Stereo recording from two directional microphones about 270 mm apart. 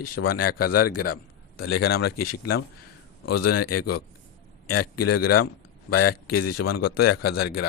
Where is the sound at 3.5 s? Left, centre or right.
Left.